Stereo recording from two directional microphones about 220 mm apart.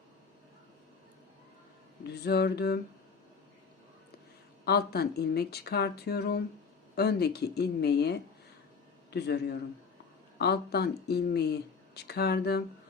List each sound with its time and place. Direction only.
2.0 s speech: 50° left (ahead or behind)
4.6 s speech: 45° left (ahead or behind)